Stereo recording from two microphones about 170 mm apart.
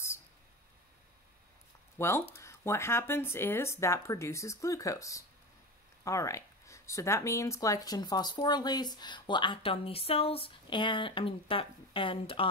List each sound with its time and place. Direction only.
2.0 s speech: 15° left (ahead or behind); by 12.4 s 30° left (ahead or behind)